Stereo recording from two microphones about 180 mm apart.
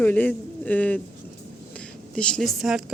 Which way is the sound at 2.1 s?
5° left (ahead or behind).